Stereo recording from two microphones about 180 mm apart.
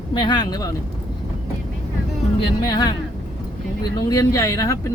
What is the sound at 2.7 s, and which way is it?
Speech, 25° left (ahead or behind).